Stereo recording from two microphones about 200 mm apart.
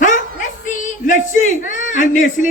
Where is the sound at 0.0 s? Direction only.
40° left (ahead or behind).